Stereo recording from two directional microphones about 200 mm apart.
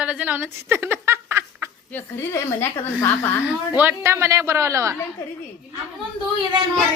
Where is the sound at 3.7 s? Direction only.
10° right (ahead or behind).